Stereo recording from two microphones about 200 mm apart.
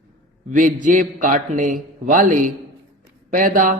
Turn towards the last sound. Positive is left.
turn(degrees=-40)  # may be behind; listen again after turning